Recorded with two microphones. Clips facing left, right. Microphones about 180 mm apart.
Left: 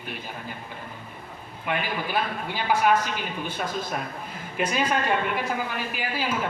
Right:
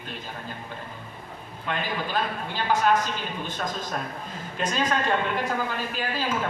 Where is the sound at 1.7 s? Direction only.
10° left (ahead or behind).